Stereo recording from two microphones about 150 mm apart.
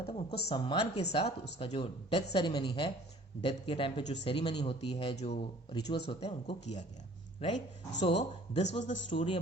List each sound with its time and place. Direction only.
0.0 s a man's voice: 40° left (ahead or behind)
8.0 s speech: 45° left (ahead or behind)
9.1 s a man's voice: 35° left (ahead or behind)